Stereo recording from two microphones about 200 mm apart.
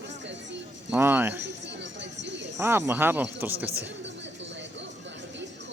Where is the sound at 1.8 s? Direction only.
60° right (ahead or behind).